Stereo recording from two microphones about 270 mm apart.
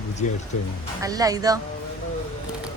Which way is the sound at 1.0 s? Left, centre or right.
Centre.